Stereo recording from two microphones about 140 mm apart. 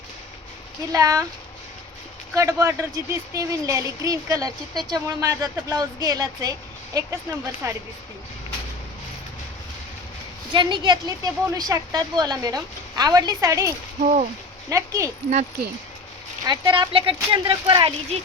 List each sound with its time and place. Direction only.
0.9 s speech: 25° right (ahead or behind)
2.3 s speech: 20° right (ahead or behind)
10.5 s speech: 35° right (ahead or behind)
14.0 s speech: 60° right (ahead or behind)
14.7 s speech: 20° right (ahead or behind)
16.4 s speech: 30° right (ahead or behind)